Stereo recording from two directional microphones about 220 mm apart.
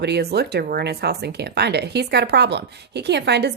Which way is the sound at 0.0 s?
50° right (ahead or behind).